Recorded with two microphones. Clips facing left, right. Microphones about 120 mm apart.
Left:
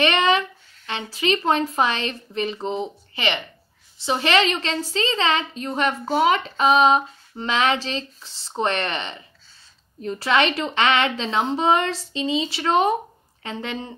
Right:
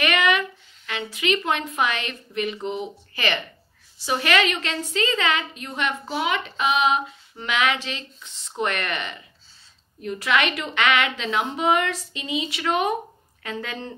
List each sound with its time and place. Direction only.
0.0 s a woman's voice: 30° left (ahead or behind)
4.0 s a sound: 25° left (ahead or behind)
13.4 s speech: 25° left (ahead or behind)